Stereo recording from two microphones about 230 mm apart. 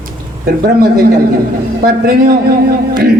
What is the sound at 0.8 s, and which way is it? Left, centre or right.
Speech, right.